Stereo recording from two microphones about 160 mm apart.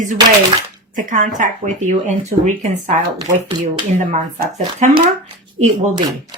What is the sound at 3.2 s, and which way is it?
Speech, 30° right (ahead or behind).